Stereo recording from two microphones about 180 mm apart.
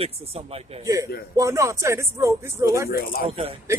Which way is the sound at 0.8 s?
20° right (ahead or behind).